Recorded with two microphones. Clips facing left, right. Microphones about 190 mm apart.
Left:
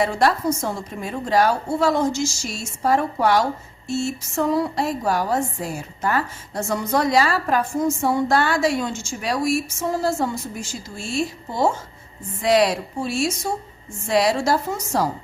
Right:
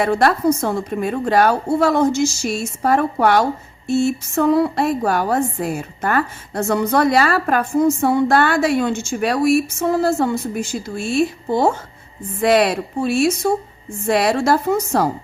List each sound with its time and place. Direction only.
0.0 s a woman's voice: 60° right (ahead or behind)